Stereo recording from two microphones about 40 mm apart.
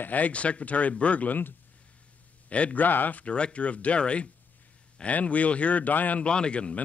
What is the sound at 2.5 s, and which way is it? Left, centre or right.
Speech, left.